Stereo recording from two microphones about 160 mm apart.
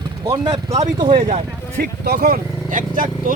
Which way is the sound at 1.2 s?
45° right (ahead or behind).